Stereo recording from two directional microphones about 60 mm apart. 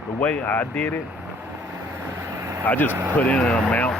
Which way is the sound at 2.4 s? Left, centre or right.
Right.